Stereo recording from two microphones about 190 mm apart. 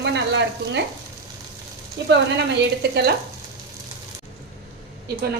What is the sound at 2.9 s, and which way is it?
Speech, 60° right (ahead or behind).